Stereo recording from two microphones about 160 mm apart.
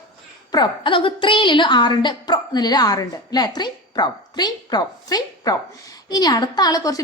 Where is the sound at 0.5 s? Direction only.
30° left (ahead or behind).